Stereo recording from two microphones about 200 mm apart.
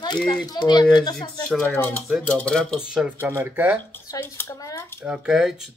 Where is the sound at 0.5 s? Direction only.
20° left (ahead or behind).